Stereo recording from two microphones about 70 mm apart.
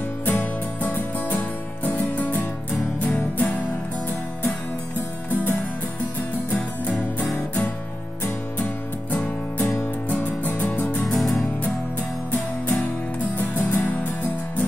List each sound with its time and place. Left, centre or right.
0.2 s music: left
5.3 s music: left
9.1 s music: left
11.1 s music: centre
13.4 s music: left